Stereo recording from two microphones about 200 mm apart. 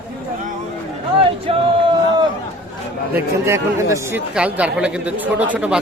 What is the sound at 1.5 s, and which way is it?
Music, 30° right (ahead or behind).